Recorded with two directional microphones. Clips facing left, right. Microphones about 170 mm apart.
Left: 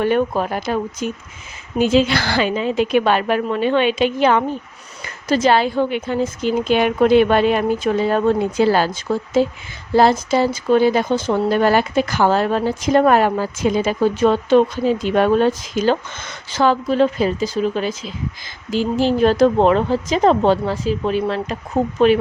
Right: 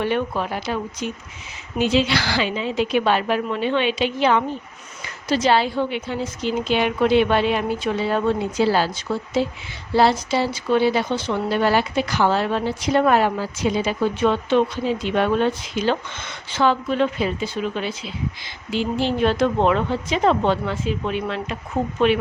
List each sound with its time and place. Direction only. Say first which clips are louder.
0.0 s speech: left 5 dB; 45° left (ahead or behind)